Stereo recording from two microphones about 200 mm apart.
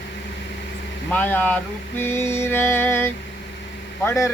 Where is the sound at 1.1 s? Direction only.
10° left (ahead or behind).